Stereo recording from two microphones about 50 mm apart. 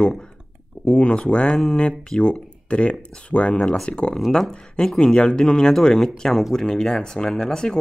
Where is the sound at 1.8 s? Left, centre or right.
Centre.